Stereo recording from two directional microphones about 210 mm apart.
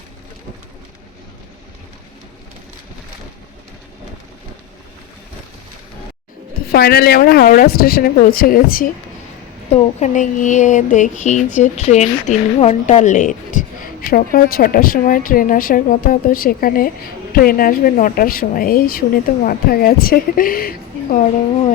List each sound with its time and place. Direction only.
6.7 s a woman's voice: 45° left (ahead or behind)